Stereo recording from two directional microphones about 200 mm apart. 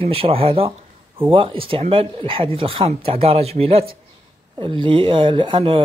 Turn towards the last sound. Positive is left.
turn(degrees=-25)  # may be behind; listen again after turning